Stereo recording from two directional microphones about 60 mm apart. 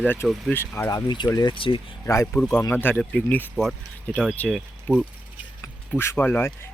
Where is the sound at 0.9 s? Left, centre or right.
Left.